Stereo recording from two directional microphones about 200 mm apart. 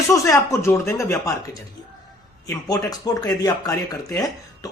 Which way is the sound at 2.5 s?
20° left (ahead or behind).